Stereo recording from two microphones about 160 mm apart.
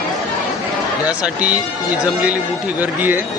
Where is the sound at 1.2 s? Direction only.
5° right (ahead or behind).